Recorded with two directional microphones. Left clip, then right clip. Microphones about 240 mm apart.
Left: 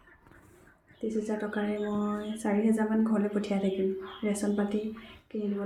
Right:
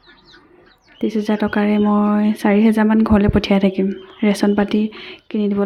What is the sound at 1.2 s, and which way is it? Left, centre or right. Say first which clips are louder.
Speech: right 14 dB; right.